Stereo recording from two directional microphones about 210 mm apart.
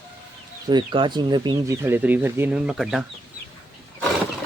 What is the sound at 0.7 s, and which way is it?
Speech, 20° right (ahead or behind).